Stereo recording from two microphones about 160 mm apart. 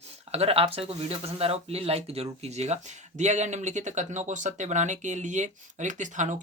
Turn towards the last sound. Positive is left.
turn(degrees=-50)  # may be behind; listen again after turning